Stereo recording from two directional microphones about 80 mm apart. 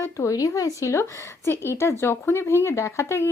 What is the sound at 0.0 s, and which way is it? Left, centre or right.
Speech, left.